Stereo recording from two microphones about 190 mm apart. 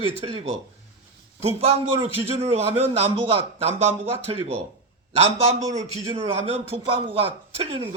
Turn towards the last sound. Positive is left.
turn(degrees=-30)  # may be behind; listen again after turning